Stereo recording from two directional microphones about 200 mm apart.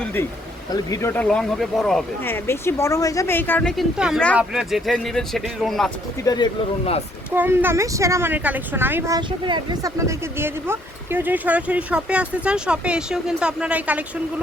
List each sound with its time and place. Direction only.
0.7 s speech: 15° left (ahead or behind)
6.2 s speech: 20° left (ahead or behind)
7.3 s speech: 10° right (ahead or behind)